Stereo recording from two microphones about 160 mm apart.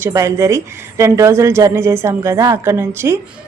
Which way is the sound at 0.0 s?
20° right (ahead or behind).